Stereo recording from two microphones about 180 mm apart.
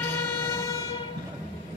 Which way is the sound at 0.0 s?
15° left (ahead or behind).